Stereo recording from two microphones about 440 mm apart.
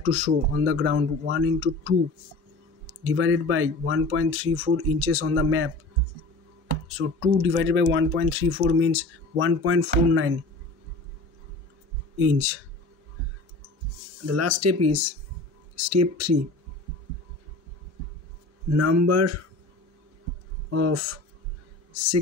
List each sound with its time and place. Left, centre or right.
0.0 s speech: right
3.0 s speech: right
6.9 s speech: right
12.2 s speech: right
14.2 s speech: right
18.7 s speech: right
20.7 s speech: right